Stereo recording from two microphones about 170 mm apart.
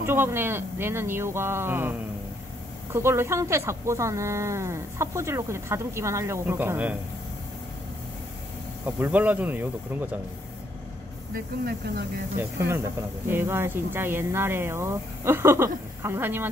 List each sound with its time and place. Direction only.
0.0 s speech: 15° right (ahead or behind)
8.8 s speech: 10° right (ahead or behind)
12.4 s speech: 15° right (ahead or behind)